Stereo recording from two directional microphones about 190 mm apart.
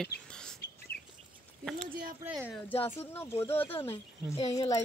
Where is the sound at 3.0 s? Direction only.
10° left (ahead or behind).